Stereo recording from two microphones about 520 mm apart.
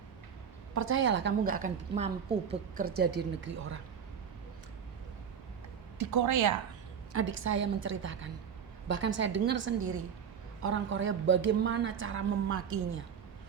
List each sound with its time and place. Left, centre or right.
0.7 s a woman's voice: right
6.0 s speech: right
7.1 s a woman's voice: right